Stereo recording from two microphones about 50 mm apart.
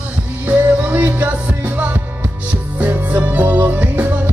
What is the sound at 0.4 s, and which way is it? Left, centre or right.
Music, right.